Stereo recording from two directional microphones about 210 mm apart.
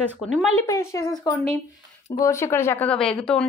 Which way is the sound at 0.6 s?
15° left (ahead or behind).